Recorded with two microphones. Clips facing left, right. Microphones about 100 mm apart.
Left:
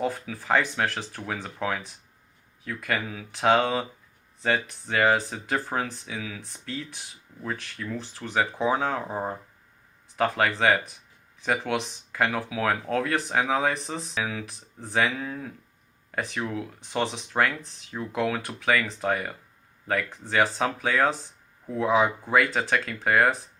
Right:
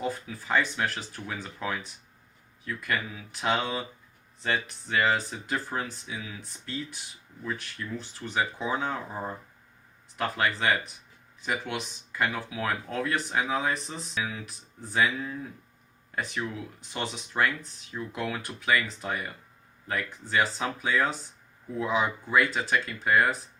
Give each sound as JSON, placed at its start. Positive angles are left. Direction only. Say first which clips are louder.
{"t": 0.0, "sound": "speech", "louder": "left 3 dB", "side_deg": 90}
{"t": 4.9, "sound": "speech", "louder": "left 3 dB", "side_deg": 80}
{"t": 8.2, "sound": "speech", "louder": "left 3 dB", "side_deg": 70}
{"t": 8.6, "sound": "speech", "louder": "left 5 dB", "side_deg": 90}
{"t": 10.2, "sound": "speech", "louder": "left 4 dB", "side_deg": 90}
{"t": 20.6, "sound": "speech", "louder": "left 3 dB", "side_deg": 90}
{"t": 21.8, "sound": "speech", "louder": "left 5 dB", "side_deg": 80}
{"t": 22.3, "sound": "speech", "louder": "left 2 dB", "side_deg": 90}